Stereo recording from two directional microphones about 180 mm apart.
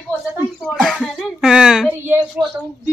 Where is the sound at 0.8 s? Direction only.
Centre (ahead or behind).